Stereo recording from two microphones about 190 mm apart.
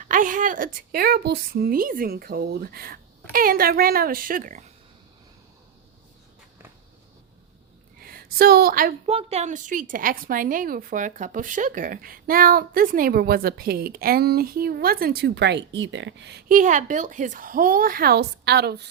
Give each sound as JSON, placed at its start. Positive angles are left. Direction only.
{"t": 0.0, "sound": "a woman's voice", "side_deg": -45}
{"t": 8.0, "sound": "a woman's voice", "side_deg": -50}
{"t": 9.0, "sound": "a woman's voice", "side_deg": -35}
{"t": 16.5, "sound": "a woman's voice", "side_deg": -45}